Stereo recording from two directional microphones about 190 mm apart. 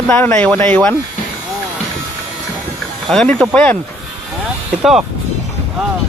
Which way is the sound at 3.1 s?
5° left (ahead or behind).